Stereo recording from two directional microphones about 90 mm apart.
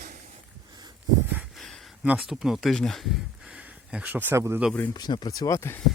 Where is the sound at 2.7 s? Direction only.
5° left (ahead or behind); by 4.4 s 20° right (ahead or behind).